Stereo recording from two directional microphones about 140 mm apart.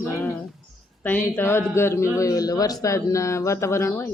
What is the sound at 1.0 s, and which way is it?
A woman's voice, 15° left (ahead or behind).